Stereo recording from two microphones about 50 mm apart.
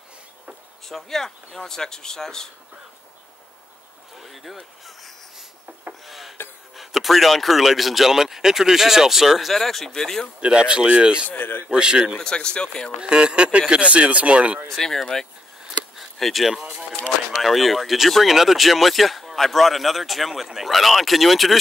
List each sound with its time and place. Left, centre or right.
0.8 s speech: centre
4.2 s a sound: centre
6.7 s speech: centre
10.4 s speech: centre
11.2 s a man's voice: left
11.7 s a man's voice: centre
12.2 s speech: centre
13.0 s speech: centre
14.7 s speech: centre